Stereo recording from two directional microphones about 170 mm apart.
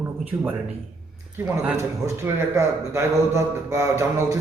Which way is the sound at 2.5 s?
15° right (ahead or behind).